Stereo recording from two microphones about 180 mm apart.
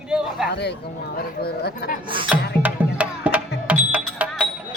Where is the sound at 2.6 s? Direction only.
10° right (ahead or behind).